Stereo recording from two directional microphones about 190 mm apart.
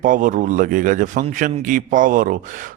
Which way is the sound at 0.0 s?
45° right (ahead or behind).